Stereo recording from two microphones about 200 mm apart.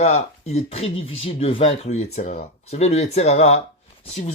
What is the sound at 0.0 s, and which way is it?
A man's voice, 35° left (ahead or behind).